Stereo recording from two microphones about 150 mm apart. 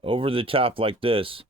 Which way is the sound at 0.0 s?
35° right (ahead or behind).